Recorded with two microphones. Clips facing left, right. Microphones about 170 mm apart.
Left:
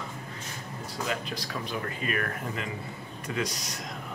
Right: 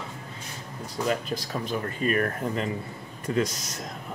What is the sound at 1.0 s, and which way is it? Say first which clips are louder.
Speech: right 6 dB; 45° right (ahead or behind).